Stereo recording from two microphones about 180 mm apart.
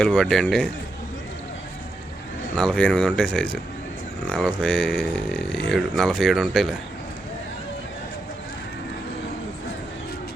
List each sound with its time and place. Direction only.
0.0 s speech: 5° left (ahead or behind)
2.6 s speech: 5° left (ahead or behind)